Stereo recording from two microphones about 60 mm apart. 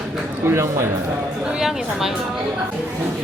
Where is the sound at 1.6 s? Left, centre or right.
Centre.